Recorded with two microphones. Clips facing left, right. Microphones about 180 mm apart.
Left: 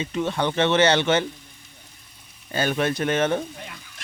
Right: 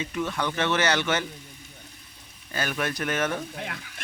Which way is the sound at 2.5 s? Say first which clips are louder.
Left 6 dB; 25° left (ahead or behind).